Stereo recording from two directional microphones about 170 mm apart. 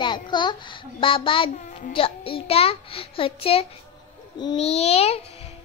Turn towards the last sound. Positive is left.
turn(degrees=35)  # may be behind; listen again after turning